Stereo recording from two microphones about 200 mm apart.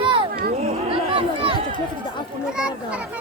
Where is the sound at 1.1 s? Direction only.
25° right (ahead or behind).